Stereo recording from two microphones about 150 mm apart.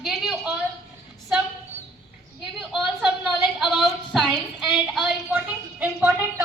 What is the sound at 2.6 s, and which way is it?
A woman's voice, centre (ahead or behind).